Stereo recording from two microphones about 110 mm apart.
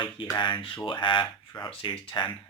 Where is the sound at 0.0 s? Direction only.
45° left (ahead or behind).